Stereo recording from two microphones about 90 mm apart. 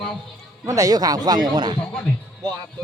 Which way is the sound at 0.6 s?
40° right (ahead or behind).